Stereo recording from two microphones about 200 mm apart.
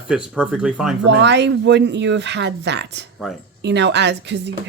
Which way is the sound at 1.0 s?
60° right (ahead or behind).